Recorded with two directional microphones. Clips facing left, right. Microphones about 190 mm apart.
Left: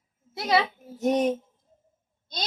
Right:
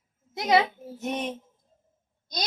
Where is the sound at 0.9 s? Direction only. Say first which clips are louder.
Left 8 dB; 40° left (ahead or behind).